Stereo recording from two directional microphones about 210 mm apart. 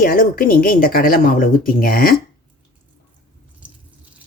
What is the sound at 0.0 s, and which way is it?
Speech, 45° left (ahead or behind).